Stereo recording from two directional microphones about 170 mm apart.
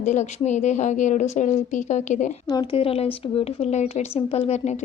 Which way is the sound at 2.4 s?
25° left (ahead or behind).